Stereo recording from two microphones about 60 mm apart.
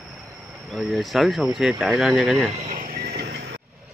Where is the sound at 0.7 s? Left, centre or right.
Centre.